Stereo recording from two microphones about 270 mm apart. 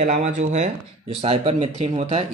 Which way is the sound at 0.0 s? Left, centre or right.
Right.